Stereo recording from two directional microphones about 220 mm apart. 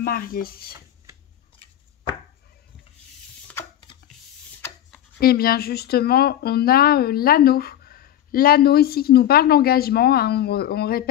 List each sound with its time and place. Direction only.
0.0 s speech: 40° left (ahead or behind)
4.6 s rub: 5° left (ahead or behind)
5.2 s speech: 45° left (ahead or behind)